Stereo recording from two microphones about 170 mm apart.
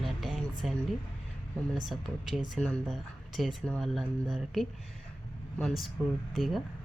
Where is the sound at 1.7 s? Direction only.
Centre (ahead or behind).